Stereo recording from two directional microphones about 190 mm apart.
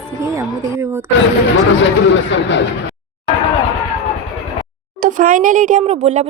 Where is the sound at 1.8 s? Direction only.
75° left (ahead or behind).